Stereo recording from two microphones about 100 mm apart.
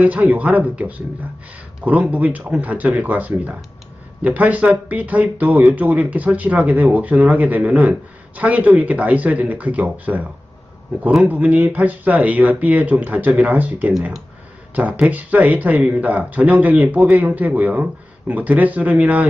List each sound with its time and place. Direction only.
0.0 s speech: 15° right (ahead or behind)